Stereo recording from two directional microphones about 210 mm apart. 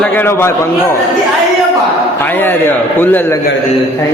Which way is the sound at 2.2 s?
10° left (ahead or behind).